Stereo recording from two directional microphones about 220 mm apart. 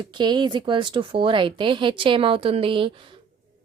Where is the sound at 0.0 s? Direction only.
20° right (ahead or behind).